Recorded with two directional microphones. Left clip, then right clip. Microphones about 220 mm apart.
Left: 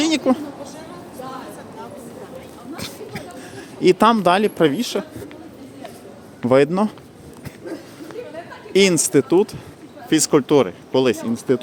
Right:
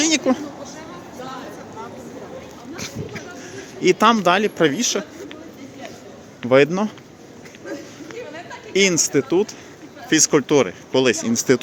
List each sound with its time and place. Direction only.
0.0 s speech: 10° left (ahead or behind)
2.7 s a sound: 15° left (ahead or behind)
3.8 s speech: 15° left (ahead or behind)
6.5 s speech: 15° left (ahead or behind)
8.7 s speech: 15° left (ahead or behind)
11.3 s speech: 5° right (ahead or behind)